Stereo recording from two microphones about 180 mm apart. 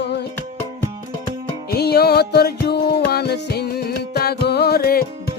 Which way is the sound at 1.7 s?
60° left (ahead or behind).